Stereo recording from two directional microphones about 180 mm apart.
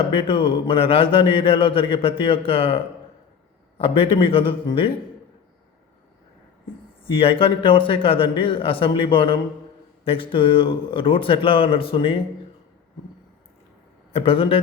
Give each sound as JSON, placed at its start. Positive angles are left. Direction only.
{"t": 0.1, "sound": "a man's voice", "side_deg": 30}
{"t": 7.0, "sound": "a man's voice", "side_deg": 30}
{"t": 14.1, "sound": "a man's voice", "side_deg": 30}